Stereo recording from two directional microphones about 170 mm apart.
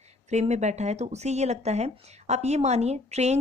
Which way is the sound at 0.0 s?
40° right (ahead or behind).